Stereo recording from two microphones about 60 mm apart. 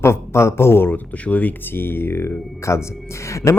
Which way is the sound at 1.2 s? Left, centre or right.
Left.